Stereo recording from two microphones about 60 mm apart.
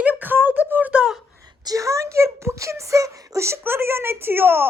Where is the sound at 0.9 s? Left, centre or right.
Centre.